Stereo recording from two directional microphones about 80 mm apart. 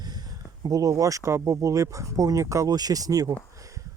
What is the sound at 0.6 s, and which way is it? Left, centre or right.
Speech, right.